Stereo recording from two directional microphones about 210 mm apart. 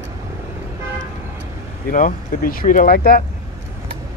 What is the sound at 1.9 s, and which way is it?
Speech, 40° left (ahead or behind).